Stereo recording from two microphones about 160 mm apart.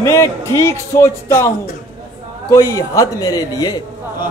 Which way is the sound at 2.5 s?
20° left (ahead or behind).